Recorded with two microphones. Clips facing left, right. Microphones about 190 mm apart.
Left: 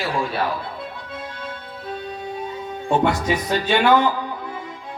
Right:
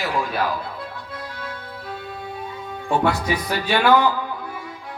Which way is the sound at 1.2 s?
25° left (ahead or behind).